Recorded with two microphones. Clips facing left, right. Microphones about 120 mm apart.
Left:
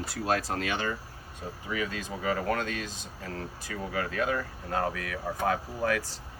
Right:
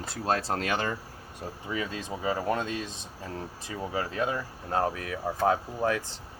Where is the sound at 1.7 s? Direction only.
30° right (ahead or behind).